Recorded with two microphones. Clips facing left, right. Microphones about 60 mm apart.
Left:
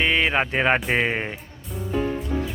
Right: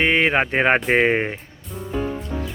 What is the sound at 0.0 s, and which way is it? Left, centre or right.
Speech, right.